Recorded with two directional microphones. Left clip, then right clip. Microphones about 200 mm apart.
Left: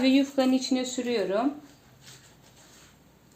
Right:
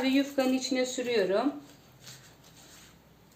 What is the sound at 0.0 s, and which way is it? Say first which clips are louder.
Speech: left 4 dB; 30° left (ahead or behind).